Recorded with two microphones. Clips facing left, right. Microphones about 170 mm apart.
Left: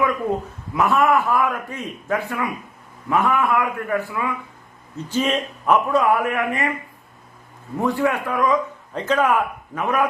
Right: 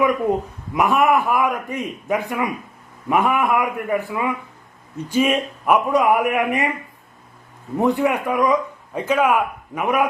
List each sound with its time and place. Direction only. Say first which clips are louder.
0.7 s speech: right 1 dB; 15° right (ahead or behind)
7.8 s speech: right 2 dB; 20° right (ahead or behind)